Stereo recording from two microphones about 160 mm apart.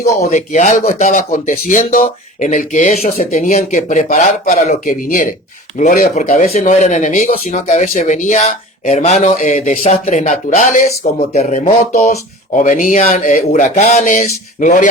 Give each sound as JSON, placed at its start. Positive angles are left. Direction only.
{"t": 0.3, "sound": "speech", "side_deg": 50}